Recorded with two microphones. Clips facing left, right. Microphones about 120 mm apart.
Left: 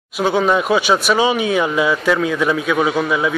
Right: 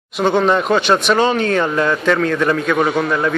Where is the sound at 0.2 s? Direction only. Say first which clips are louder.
Right 1 dB; 5° left (ahead or behind).